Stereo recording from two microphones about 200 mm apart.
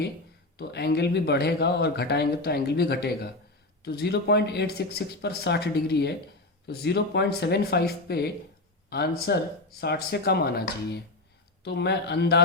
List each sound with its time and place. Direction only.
0.5 s speech: 55° left (ahead or behind)